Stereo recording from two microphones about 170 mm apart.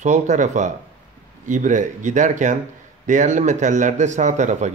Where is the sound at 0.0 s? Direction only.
45° right (ahead or behind).